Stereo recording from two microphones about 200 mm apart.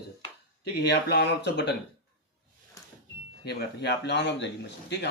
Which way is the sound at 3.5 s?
55° left (ahead or behind).